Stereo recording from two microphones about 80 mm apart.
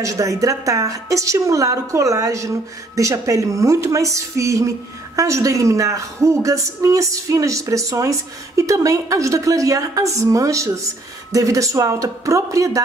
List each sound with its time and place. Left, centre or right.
0.0 s a woman's voice: right